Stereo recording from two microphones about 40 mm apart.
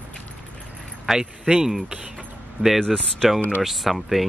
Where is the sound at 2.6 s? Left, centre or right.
Right.